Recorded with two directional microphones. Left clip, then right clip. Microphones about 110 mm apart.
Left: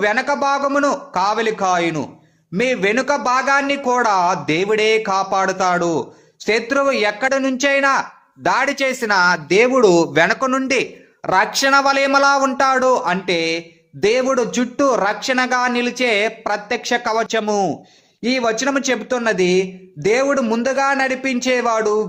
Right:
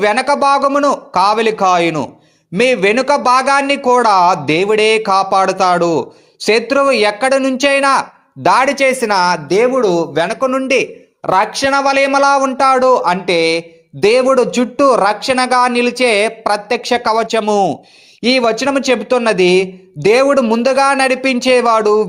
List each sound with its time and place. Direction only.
0.0 s speech: 35° right (ahead or behind)
9.6 s speech: 30° left (ahead or behind)
10.2 s speech: 5° right (ahead or behind)
10.7 s speech: 20° right (ahead or behind)
18.2 s speech: 30° right (ahead or behind)